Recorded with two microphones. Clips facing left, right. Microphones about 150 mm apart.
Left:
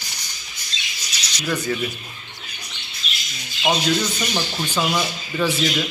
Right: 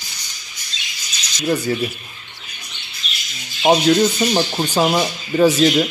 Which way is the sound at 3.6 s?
40° right (ahead or behind).